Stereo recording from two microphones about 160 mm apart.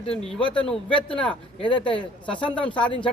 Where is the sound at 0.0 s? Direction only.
35° left (ahead or behind).